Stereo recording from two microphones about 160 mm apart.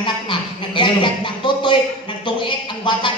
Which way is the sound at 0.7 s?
30° left (ahead or behind).